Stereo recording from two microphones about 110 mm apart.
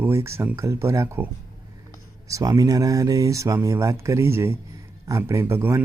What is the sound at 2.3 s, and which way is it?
Speech, 35° right (ahead or behind).